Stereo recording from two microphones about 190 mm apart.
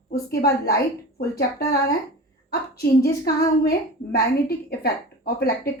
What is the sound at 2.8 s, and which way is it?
Speech, 55° left (ahead or behind).